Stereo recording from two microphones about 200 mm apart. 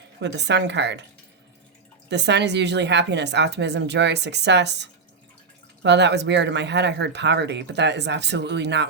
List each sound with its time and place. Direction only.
0.2 s speech: 60° right (ahead or behind)
2.0 s speech: 60° right (ahead or behind)